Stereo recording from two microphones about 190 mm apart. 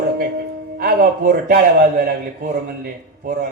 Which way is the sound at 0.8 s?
50° right (ahead or behind).